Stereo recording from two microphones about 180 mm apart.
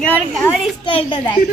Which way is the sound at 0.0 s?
5° left (ahead or behind).